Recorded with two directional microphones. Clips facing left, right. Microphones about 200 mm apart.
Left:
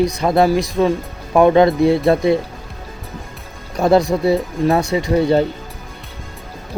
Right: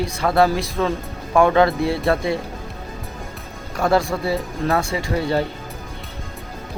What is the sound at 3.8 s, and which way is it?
Speech, 20° left (ahead or behind).